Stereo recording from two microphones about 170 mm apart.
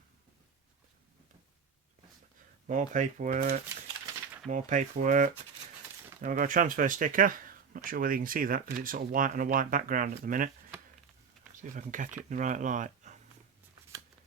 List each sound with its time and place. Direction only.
2.6 s speech: 45° right (ahead or behind)
11.6 s speech: 45° right (ahead or behind)